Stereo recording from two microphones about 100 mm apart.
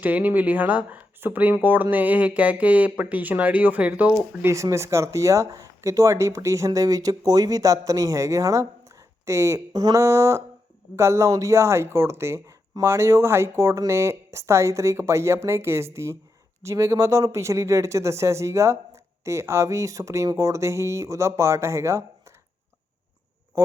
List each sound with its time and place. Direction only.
0.0 s speech: 15° right (ahead or behind)
4.4 s speech: 30° right (ahead or behind)
9.7 s speech: 40° right (ahead or behind)
10.0 s speech: 30° right (ahead or behind)